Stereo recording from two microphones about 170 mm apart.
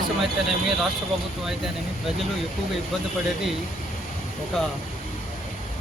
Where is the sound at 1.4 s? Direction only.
Centre (ahead or behind).